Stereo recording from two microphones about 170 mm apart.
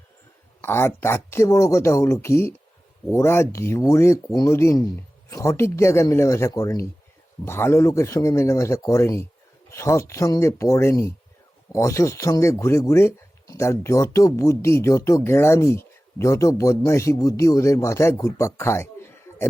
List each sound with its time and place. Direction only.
0.6 s speech: 15° left (ahead or behind)